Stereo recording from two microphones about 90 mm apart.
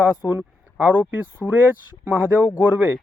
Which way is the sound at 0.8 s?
20° right (ahead or behind).